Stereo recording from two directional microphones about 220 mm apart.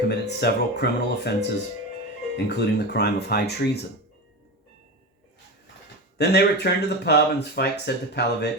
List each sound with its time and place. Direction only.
0.1 s speech: 50° left (ahead or behind)
6.1 s speech: 50° left (ahead or behind)